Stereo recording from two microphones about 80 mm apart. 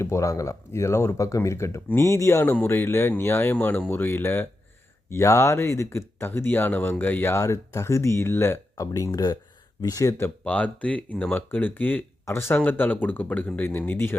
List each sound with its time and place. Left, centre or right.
0.0 s speech: left
2.5 s speech: left
8.9 s speech: left
10.4 s speech: centre